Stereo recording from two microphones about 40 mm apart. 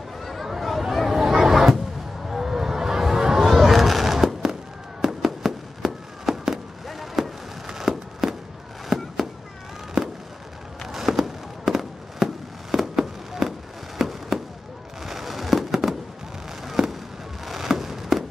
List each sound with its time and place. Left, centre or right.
0.2 s a sound: centre
2.2 s music: centre
3.4 s fireworks: centre
7.6 s a sound: centre
8.8 s fireworks: centre
10.9 s fireworks: centre